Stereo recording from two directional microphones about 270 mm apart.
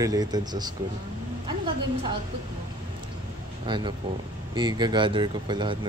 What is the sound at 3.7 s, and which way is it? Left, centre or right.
A woman's voice, centre.